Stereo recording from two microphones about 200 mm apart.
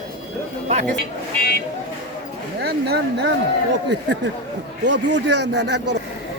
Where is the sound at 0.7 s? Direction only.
35° right (ahead or behind).